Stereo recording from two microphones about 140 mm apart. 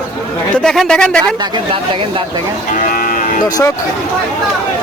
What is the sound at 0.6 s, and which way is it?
Speech, 5° left (ahead or behind).